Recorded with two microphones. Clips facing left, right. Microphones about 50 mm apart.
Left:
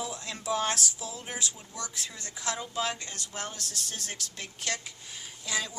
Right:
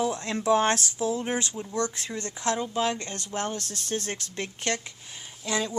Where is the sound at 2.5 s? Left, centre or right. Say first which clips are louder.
Right 4 dB; right.